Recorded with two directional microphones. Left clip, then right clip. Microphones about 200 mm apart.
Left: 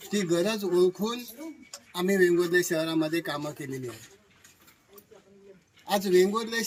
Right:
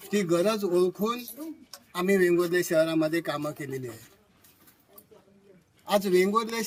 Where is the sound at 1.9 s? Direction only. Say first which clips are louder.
Even; 25° right (ahead or behind).